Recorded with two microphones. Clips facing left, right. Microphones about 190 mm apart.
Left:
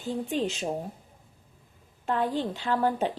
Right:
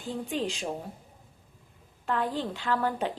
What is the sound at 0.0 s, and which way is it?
Speech, 45° left (ahead or behind).